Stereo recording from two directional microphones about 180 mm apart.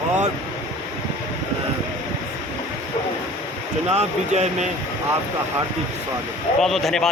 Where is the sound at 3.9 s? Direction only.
40° right (ahead or behind).